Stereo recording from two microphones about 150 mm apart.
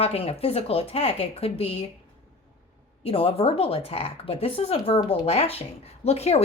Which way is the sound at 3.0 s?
40° left (ahead or behind).